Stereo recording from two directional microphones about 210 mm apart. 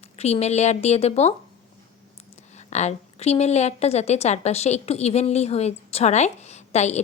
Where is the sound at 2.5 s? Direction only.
35° left (ahead or behind).